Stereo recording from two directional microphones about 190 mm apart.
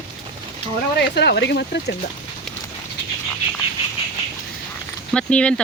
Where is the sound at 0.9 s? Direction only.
60° left (ahead or behind).